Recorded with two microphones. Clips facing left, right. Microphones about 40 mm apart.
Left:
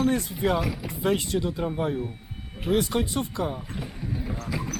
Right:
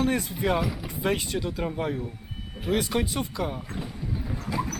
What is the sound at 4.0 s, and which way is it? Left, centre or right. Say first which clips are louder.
Clip-clop: left 3 dB; left.